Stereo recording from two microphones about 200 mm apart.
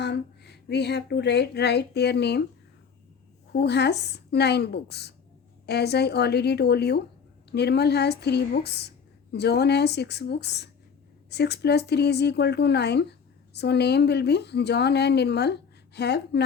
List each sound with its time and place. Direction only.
0.0 s speech: 55° left (ahead or behind)
3.5 s speech: 55° left (ahead or behind)